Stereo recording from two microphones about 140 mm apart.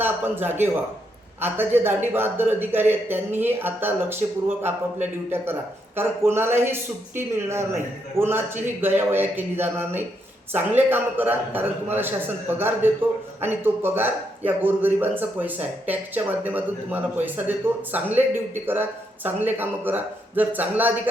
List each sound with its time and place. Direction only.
0.0 s a man's voice: 15° right (ahead or behind)